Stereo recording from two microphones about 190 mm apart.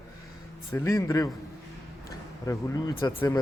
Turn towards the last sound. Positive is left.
turn(degrees=15)  # may be behind; listen again after turning